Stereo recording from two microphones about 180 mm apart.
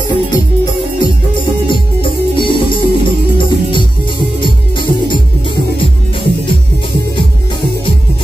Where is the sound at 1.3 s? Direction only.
25° left (ahead or behind).